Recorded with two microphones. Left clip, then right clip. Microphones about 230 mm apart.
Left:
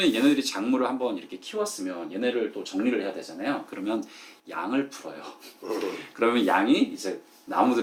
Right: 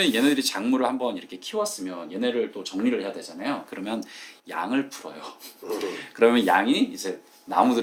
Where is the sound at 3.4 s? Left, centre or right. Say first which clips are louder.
Even; right.